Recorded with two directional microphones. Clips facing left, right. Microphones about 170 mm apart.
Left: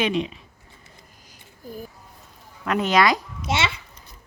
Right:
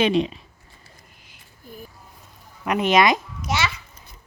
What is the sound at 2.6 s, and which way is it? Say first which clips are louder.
Speech: right 1 dB; 15° right (ahead or behind).